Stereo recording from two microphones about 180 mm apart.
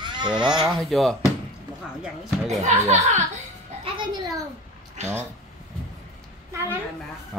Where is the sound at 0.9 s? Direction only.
Centre (ahead or behind).